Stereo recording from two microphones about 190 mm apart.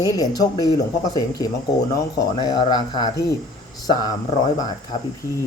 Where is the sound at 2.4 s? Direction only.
20° left (ahead or behind).